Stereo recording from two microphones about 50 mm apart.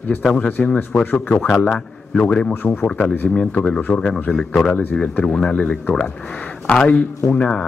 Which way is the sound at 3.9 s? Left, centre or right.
Centre.